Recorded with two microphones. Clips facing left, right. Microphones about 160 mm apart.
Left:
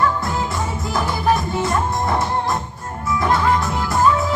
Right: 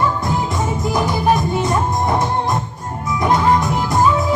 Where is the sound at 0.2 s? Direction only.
20° right (ahead or behind).